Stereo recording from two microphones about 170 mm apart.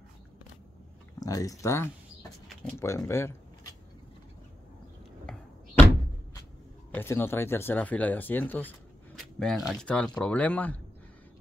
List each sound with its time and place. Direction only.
1.2 s speech: 20° left (ahead or behind)
2.4 s a sound: centre (ahead or behind)
2.8 s speech: 15° left (ahead or behind)
5.3 s a sound: 5° left (ahead or behind)
6.9 s speech: 15° left (ahead or behind)
9.4 s speech: centre (ahead or behind)